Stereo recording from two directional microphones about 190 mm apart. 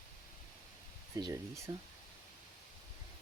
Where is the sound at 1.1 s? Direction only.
15° right (ahead or behind).